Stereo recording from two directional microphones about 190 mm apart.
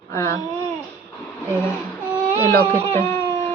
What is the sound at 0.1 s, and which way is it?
Speech, 15° left (ahead or behind).